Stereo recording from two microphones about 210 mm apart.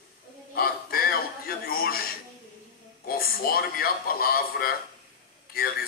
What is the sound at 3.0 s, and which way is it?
Speech, 45° left (ahead or behind).